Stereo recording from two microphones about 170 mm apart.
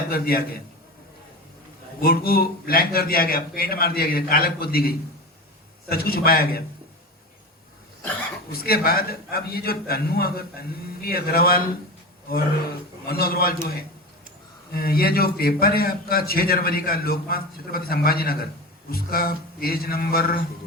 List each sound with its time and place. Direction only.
0.1 s a man's voice: 60° left (ahead or behind)
2.0 s a man's voice: 60° left (ahead or behind)
8.6 s a man's voice: 60° left (ahead or behind)
13.1 s a man's voice: 65° left (ahead or behind)